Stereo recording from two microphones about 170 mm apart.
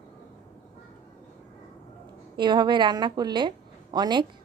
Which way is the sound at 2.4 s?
25° right (ahead or behind).